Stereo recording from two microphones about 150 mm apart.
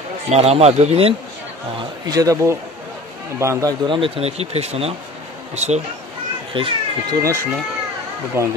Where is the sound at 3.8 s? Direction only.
35° right (ahead or behind).